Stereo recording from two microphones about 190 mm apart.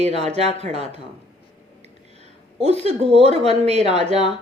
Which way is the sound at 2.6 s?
35° right (ahead or behind).